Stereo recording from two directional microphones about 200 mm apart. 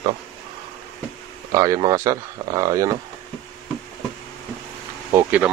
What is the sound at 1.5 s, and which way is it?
Speech, 15° right (ahead or behind).